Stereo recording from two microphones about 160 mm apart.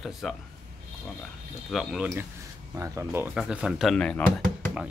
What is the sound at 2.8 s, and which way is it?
Speech, 15° right (ahead or behind).